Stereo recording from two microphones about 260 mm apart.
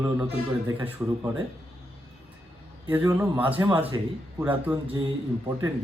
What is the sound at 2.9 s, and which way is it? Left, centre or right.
A man's voice, centre.